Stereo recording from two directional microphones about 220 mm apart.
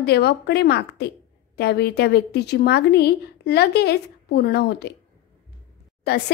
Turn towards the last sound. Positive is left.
turn(degrees=45)  # may be behind; listen again after turning